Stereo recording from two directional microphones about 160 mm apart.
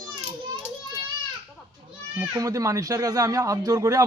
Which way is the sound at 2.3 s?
20° right (ahead or behind).